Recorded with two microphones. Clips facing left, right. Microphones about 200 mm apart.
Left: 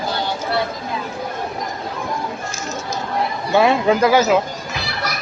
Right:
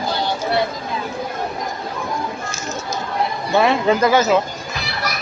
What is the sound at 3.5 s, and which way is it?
Speech, 10° left (ahead or behind).